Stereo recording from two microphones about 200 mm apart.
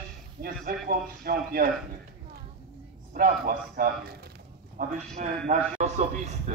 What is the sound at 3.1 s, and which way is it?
A man's voice, 45° right (ahead or behind).